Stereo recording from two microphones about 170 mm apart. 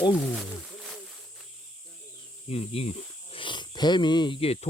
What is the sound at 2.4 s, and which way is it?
Speech, 35° left (ahead or behind).